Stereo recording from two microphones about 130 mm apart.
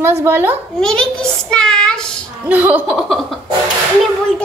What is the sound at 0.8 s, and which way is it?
Child singing, 5° left (ahead or behind).